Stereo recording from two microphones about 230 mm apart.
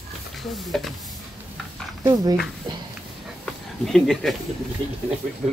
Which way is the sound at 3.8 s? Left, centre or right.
Centre.